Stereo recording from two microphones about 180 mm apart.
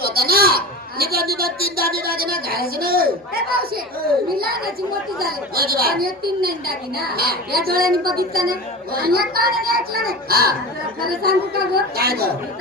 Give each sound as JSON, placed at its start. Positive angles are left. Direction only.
{"t": 0.0, "sound": "a woman's voice", "side_deg": -60}